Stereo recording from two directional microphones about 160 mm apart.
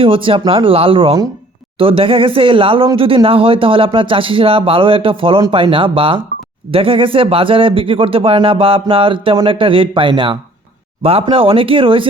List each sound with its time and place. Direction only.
0.0 s speech: 35° right (ahead or behind)